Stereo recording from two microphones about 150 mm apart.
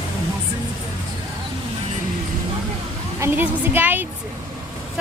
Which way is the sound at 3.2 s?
15° right (ahead or behind).